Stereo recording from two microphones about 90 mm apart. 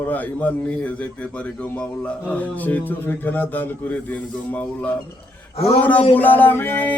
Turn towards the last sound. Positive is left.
turn(degrees=20)  # may be behind; listen again after turning